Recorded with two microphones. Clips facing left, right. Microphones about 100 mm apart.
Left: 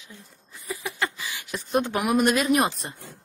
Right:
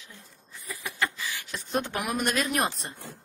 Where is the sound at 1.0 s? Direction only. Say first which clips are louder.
Right 2 dB; 15° left (ahead or behind).